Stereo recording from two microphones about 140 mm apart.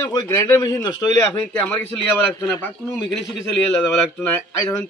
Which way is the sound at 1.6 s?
10° left (ahead or behind).